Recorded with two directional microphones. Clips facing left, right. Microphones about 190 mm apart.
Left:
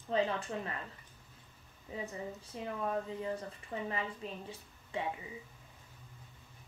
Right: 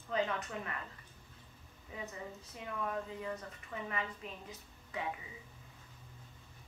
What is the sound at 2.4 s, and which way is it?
A woman's voice, 30° left (ahead or behind).